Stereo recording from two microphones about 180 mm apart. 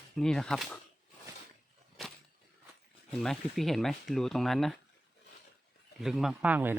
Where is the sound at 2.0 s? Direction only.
Centre (ahead or behind).